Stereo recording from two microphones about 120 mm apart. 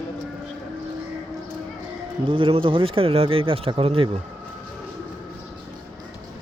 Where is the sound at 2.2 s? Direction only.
45° right (ahead or behind).